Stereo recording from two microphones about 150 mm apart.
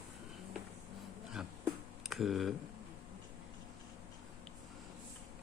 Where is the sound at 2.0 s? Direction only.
Centre (ahead or behind).